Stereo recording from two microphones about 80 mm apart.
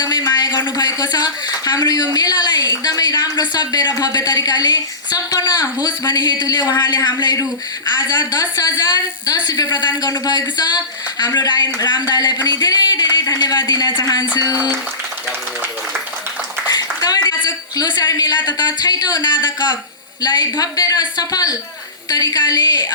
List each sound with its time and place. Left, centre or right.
0.0 s speech: left
16.6 s a sound: left
17.2 s speech: left
20.2 s speech: left